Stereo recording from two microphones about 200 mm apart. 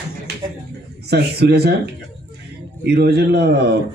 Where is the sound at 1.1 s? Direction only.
55° right (ahead or behind).